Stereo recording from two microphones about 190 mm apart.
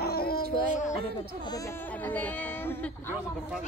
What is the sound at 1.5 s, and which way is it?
Speech, 15° left (ahead or behind).